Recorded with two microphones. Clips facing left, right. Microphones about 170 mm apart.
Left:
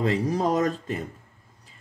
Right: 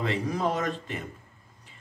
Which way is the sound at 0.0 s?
40° left (ahead or behind).